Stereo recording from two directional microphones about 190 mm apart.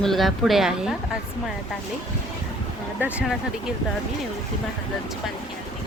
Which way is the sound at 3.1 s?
5° right (ahead or behind).